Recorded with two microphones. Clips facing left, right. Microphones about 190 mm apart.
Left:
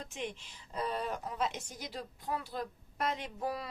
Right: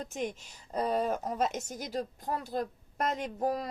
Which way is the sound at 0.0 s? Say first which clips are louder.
Right 5 dB; 40° right (ahead or behind).